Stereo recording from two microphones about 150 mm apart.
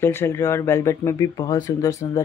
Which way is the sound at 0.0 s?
15° left (ahead or behind).